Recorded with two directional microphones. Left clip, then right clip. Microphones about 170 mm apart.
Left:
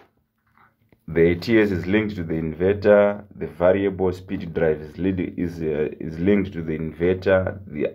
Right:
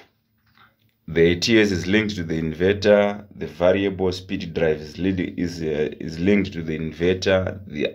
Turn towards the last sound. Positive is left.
turn(degrees=-10)  # may be behind; listen again after turning